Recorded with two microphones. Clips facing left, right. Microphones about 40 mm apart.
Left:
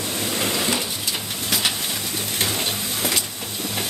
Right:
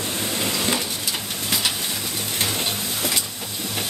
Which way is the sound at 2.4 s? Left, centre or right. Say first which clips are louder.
Even; centre.